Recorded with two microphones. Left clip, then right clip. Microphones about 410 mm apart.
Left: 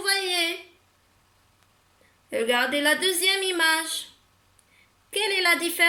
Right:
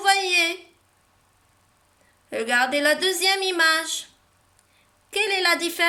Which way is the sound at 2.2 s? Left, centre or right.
Right.